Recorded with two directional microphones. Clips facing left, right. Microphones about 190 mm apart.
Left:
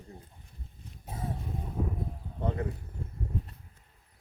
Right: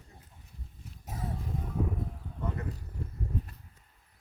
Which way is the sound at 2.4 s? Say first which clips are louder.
Left 5 dB; 30° left (ahead or behind).